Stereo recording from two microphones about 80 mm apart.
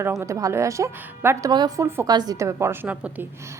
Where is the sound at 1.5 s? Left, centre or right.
Right.